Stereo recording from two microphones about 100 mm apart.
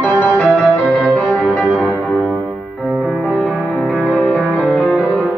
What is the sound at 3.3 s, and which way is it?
Music, 10° left (ahead or behind).